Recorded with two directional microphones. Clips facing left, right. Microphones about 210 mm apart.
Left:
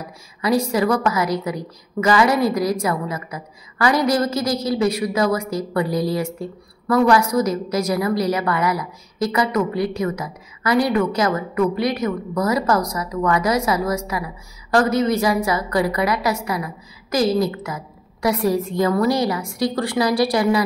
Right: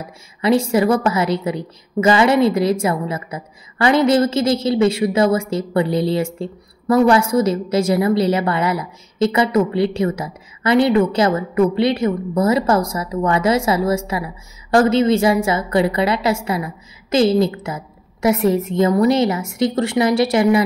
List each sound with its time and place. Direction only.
0.4 s a woman's voice: 25° right (ahead or behind)